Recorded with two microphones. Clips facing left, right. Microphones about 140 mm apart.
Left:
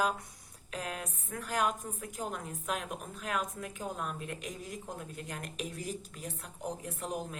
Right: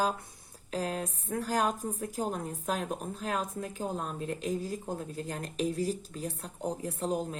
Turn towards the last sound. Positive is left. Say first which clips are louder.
# right 6 dB
turn(degrees=-30)  # may be behind; listen again after turning